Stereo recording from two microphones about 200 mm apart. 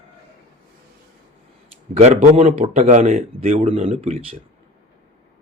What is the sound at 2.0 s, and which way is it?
Speech, 35° right (ahead or behind).